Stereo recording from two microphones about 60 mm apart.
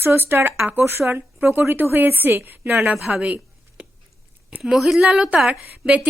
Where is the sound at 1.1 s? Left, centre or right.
Right.